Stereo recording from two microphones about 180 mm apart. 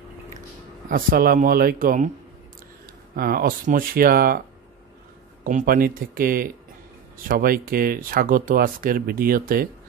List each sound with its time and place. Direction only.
0.8 s speech: 50° right (ahead or behind)
3.2 s speech: 55° right (ahead or behind)
5.4 s speech: 50° right (ahead or behind)